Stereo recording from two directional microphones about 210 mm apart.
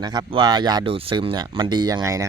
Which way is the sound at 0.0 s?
20° right (ahead or behind).